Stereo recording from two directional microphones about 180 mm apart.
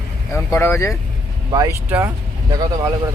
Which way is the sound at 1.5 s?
20° right (ahead or behind).